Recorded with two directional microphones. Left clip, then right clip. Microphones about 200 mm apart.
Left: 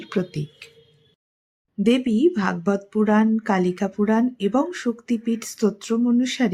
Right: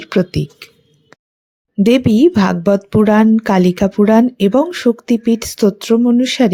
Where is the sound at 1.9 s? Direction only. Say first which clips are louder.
Right 8 dB; 45° right (ahead or behind).